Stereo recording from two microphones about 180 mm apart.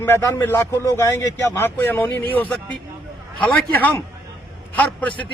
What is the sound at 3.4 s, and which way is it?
A man's voice, 10° left (ahead or behind).